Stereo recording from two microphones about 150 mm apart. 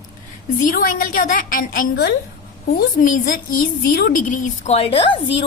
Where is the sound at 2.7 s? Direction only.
70° left (ahead or behind).